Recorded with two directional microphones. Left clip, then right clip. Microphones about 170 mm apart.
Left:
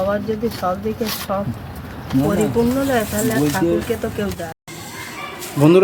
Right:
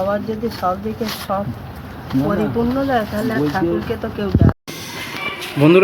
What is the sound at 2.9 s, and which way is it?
Speech, 40° left (ahead or behind).